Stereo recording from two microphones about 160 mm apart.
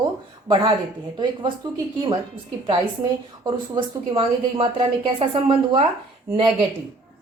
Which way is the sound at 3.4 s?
35° right (ahead or behind).